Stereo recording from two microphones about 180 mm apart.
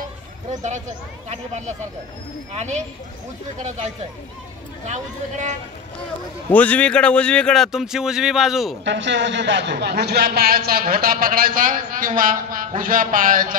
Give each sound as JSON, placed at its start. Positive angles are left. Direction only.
{"t": 0.6, "sound": "speech", "side_deg": -40}
{"t": 4.8, "sound": "speech", "side_deg": -40}
{"t": 6.5, "sound": "speech", "side_deg": 10}
{"t": 8.8, "sound": "speech", "side_deg": -80}